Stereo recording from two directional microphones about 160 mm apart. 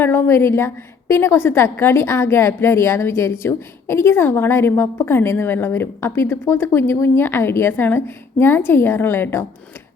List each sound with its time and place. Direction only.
0.0 s a woman's voice: 15° left (ahead or behind)